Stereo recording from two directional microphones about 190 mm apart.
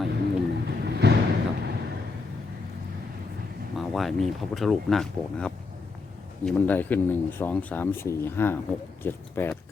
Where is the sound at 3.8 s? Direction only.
Centre (ahead or behind).